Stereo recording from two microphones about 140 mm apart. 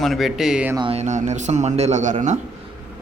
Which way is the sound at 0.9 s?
55° right (ahead or behind).